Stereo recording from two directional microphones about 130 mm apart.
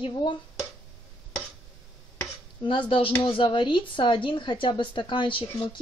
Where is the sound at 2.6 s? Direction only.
40° left (ahead or behind).